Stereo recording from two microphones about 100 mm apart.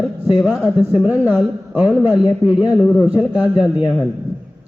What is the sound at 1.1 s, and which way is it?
Speech, 20° right (ahead or behind).